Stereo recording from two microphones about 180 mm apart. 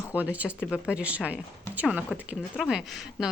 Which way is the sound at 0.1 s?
10° right (ahead or behind).